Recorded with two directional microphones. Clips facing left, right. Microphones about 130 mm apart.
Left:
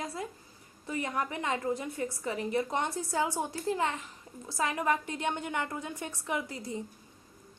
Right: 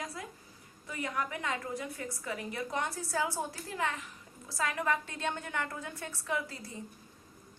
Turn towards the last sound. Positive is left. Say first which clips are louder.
# left 2 dB
turn(degrees=20)  # may be behind; listen again after turning